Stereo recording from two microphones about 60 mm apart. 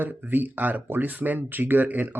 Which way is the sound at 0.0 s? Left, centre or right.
Right.